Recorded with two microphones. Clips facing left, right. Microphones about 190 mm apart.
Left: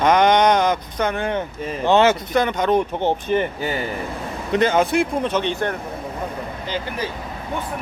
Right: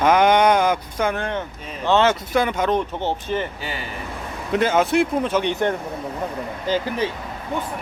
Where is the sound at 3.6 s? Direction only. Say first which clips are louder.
Left 7 dB; 45° left (ahead or behind).